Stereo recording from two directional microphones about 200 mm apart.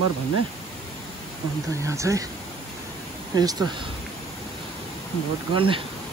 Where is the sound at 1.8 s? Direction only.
15° right (ahead or behind).